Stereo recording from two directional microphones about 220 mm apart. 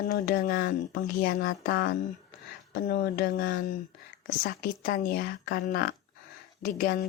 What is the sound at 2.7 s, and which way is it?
Speech, 45° left (ahead or behind).